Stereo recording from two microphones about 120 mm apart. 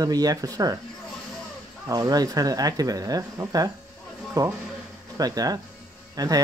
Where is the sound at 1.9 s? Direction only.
30° right (ahead or behind).